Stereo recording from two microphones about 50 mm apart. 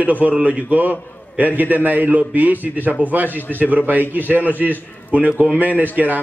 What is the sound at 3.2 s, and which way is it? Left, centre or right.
Speech, left.